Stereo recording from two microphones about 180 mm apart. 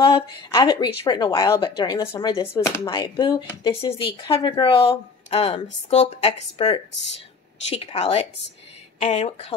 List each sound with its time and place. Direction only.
0.5 s a woman's voice: 20° left (ahead or behind)